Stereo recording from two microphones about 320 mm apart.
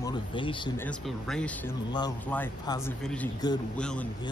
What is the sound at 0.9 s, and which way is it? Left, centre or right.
Speech, centre.